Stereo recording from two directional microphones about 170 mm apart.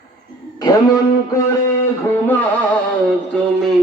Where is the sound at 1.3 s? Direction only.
15° left (ahead or behind).